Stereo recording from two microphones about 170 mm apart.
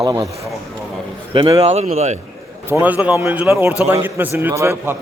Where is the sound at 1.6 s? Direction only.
40° right (ahead or behind).